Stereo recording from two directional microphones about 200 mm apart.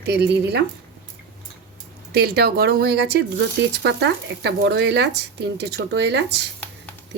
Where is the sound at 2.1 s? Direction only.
50° right (ahead or behind).